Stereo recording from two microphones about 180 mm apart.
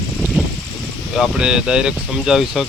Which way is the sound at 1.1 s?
5° right (ahead or behind).